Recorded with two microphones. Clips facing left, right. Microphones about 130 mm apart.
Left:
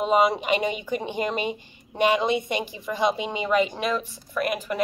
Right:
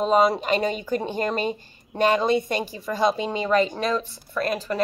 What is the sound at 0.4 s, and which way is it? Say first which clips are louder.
Speech: right 1 dB; 15° left (ahead or behind).